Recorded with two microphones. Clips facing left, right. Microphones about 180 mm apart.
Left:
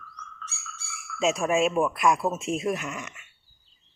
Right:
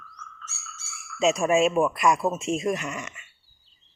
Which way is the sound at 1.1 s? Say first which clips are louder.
Right 3 dB; centre (ahead or behind).